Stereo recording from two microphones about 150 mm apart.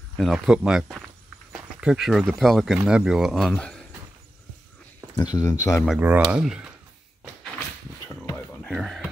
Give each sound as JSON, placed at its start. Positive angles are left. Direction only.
{"t": 0.2, "sound": "speech", "side_deg": 0}
{"t": 5.1, "sound": "speech", "side_deg": 25}
{"t": 5.9, "sound": "speech", "side_deg": -10}
{"t": 8.7, "sound": "speech", "side_deg": 0}